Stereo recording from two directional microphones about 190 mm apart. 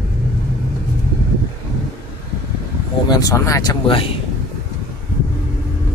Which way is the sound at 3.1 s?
20° left (ahead or behind).